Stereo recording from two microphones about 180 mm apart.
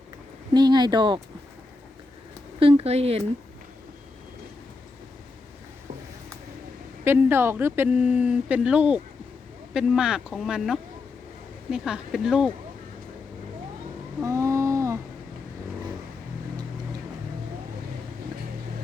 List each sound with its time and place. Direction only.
0.5 s speech: 25° right (ahead or behind)
2.6 s speech: 30° right (ahead or behind)
7.0 s speech: 10° right (ahead or behind)
14.2 s a sound: 15° right (ahead or behind)